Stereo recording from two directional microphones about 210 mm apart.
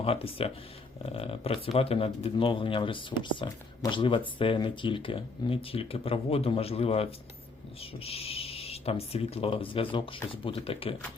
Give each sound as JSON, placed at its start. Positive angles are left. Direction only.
{"t": 0.0, "sound": "speech", "side_deg": 30}